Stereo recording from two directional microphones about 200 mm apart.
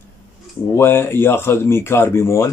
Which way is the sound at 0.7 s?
10° left (ahead or behind).